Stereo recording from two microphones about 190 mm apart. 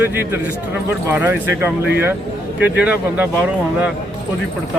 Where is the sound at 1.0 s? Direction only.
10° right (ahead or behind).